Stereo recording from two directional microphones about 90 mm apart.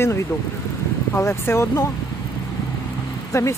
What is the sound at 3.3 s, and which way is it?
Speech, 35° left (ahead or behind).